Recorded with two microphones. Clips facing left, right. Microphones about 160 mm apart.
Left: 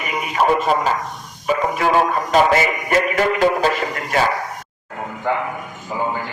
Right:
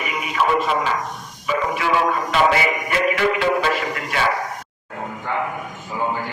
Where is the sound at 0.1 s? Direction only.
40° left (ahead or behind).